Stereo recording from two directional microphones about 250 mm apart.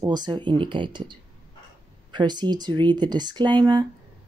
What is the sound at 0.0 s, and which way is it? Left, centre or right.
Speech, centre.